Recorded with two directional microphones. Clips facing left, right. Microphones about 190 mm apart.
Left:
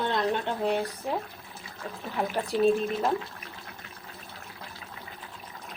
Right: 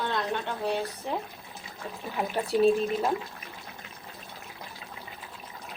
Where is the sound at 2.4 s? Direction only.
Centre (ahead or behind).